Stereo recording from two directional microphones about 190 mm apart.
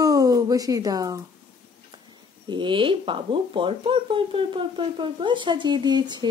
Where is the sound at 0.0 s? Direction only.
20° right (ahead or behind).